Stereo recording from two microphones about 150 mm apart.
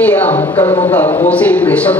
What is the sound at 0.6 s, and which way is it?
Speech, 45° left (ahead or behind).